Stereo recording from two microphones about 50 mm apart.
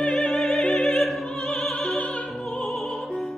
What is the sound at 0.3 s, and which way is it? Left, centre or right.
Opera, centre.